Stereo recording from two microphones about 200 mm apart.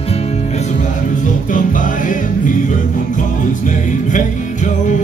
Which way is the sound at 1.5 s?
40° left (ahead or behind).